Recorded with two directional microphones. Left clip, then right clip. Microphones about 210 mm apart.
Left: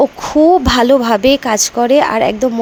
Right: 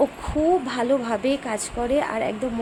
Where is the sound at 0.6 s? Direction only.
45° left (ahead or behind).